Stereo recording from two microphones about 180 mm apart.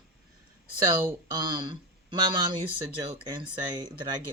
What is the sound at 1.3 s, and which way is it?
Speech, 25° right (ahead or behind).